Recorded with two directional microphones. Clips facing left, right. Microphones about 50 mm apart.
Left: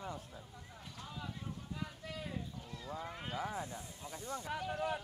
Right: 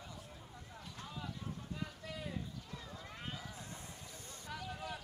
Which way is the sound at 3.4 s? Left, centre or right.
Left.